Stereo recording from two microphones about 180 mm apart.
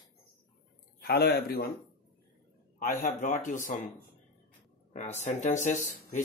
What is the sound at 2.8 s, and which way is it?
Speech, 50° left (ahead or behind).